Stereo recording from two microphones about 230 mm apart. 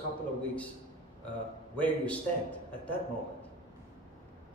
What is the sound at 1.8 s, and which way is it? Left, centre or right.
A man's voice, centre.